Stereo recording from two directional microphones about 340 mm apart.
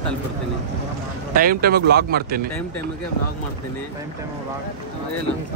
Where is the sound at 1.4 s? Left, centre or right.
Right.